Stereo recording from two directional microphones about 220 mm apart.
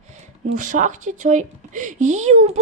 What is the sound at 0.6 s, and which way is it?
Speech, 35° right (ahead or behind).